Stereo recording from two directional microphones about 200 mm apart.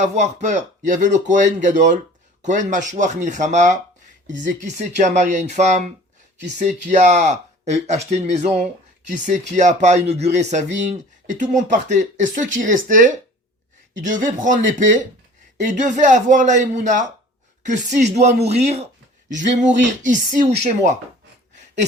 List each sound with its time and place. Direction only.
0.0 s speech: 35° right (ahead or behind)
15.6 s speech: 40° right (ahead or behind)